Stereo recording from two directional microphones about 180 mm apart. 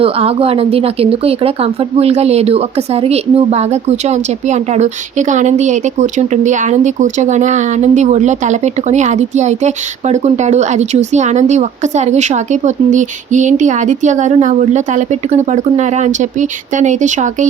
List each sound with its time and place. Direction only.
0.0 s speech: 30° right (ahead or behind)